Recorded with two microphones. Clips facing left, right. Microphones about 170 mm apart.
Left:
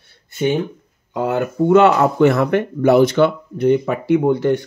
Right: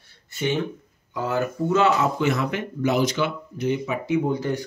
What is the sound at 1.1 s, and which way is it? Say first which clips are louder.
Speech: left 6 dB; 60° left (ahead or behind).